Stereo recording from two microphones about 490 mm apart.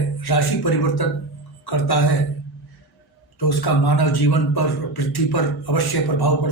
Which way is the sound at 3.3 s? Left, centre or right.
Left.